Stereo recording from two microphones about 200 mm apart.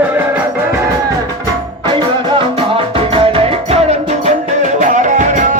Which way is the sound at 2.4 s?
30° right (ahead or behind).